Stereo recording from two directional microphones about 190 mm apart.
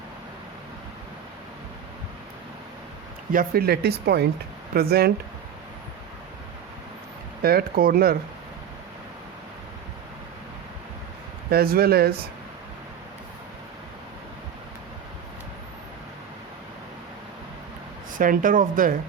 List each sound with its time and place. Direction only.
3.3 s speech: 55° right (ahead or behind)
7.4 s speech: 50° right (ahead or behind)
11.5 s speech: 55° right (ahead or behind)
18.2 s speech: 45° right (ahead or behind)